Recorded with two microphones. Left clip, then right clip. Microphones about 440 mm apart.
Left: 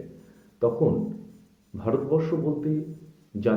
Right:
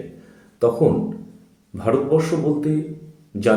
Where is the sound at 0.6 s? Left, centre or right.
Left.